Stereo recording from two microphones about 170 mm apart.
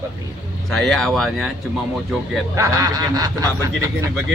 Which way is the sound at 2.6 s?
20° right (ahead or behind).